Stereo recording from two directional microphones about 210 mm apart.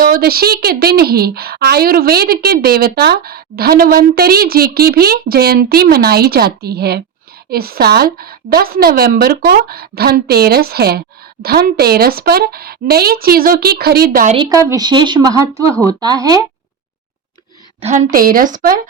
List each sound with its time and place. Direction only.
0.0 s a woman's voice: 45° right (ahead or behind)
14.3 s speech: 15° right (ahead or behind)
17.8 s a woman's voice: 40° right (ahead or behind)